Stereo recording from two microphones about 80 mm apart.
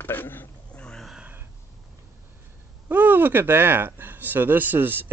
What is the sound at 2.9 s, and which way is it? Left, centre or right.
Speech, right.